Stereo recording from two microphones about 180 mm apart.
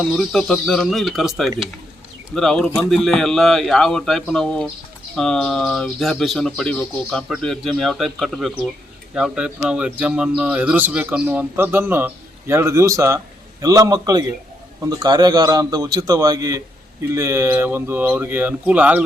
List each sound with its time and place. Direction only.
0.0 s a man's voice: centre (ahead or behind)